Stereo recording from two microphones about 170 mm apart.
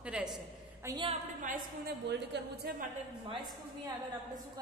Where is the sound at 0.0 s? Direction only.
5° right (ahead or behind).